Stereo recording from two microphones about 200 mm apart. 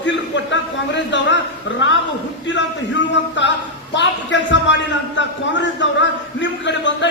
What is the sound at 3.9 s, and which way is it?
A man's voice, 65° left (ahead or behind).